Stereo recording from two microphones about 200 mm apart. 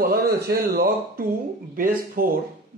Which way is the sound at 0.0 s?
50° right (ahead or behind).